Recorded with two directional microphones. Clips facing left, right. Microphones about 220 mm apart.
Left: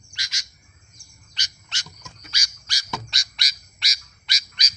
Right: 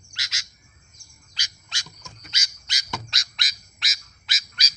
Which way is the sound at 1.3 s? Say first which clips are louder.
Left 1 dB; 10° right (ahead or behind).